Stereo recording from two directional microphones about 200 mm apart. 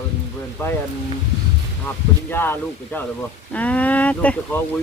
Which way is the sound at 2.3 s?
10° left (ahead or behind).